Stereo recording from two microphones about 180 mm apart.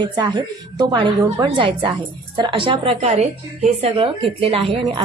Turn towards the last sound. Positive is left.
turn(degrees=-30)  # may be behind; listen again after turning